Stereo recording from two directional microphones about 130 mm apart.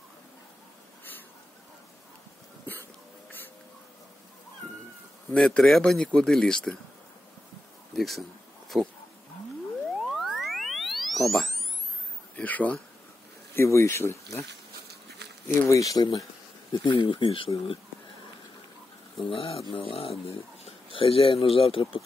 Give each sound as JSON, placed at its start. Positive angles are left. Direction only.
{"t": 2.6, "sound": "a sound", "side_deg": 15}
{"t": 5.3, "sound": "speech", "side_deg": 10}
{"t": 7.9, "sound": "a sound", "side_deg": 0}
{"t": 8.7, "sound": "speech", "side_deg": -5}
{"t": 10.0, "sound": "boing", "side_deg": 0}
{"t": 12.4, "sound": "a sound", "side_deg": 10}
{"t": 13.6, "sound": "speech", "side_deg": 20}
{"t": 15.7, "sound": "speech", "side_deg": 25}
{"t": 19.1, "sound": "speech", "side_deg": 45}